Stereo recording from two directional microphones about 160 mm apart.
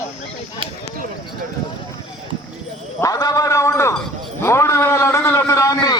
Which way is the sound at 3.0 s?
20° left (ahead or behind).